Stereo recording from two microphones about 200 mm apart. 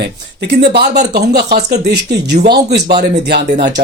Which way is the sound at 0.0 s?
55° right (ahead or behind).